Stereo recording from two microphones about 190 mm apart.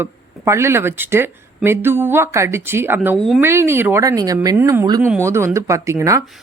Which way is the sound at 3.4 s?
15° right (ahead or behind).